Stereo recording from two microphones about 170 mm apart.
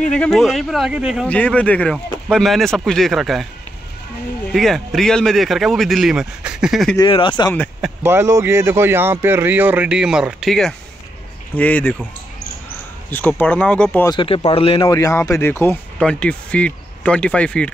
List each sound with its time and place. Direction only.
0.1 s speech: 5° left (ahead or behind)
1.2 s speech: 10° left (ahead or behind)
4.6 s speech: centre (ahead or behind)
7.1 s speech: 30° left (ahead or behind)
8.0 s speech: 15° right (ahead or behind); by 12.0 s 10° left (ahead or behind)
13.1 s speech: 10° left (ahead or behind)
14.1 s speech: 30° left (ahead or behind)
14.9 s speech: 20° left (ahead or behind)